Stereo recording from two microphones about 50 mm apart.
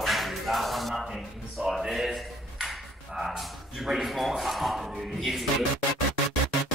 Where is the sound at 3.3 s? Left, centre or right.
Centre.